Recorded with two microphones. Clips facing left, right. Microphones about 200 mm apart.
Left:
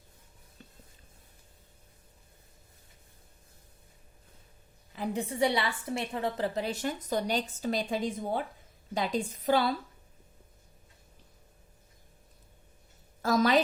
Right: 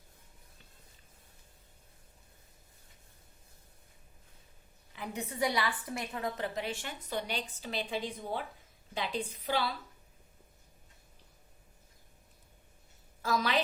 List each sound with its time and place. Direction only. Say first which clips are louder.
4.9 s a woman's voice: left 6 dB; 30° left (ahead or behind); by 9.7 s 45° left (ahead or behind)
13.2 s a woman's voice: left 7 dB; 45° left (ahead or behind)